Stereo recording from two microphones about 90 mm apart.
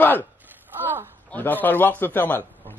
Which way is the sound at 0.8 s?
25° right (ahead or behind).